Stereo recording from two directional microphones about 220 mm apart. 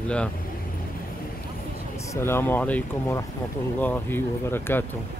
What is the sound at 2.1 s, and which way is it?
Speech, 10° left (ahead or behind).